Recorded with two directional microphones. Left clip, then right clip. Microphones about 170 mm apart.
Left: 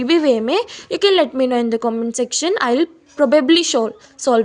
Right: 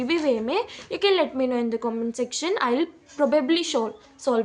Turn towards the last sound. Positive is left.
turn(degrees=45)  # may be behind; listen again after turning